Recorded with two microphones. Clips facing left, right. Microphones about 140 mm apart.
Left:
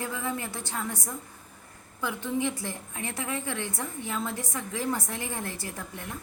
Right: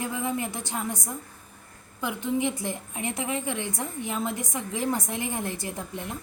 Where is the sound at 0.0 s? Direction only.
15° right (ahead or behind).